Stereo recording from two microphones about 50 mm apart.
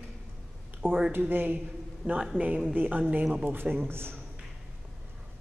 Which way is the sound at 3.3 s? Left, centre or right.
Right.